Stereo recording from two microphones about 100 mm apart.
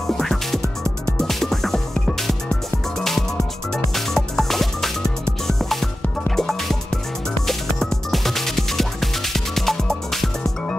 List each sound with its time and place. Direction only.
0.2 s music: 5° left (ahead or behind)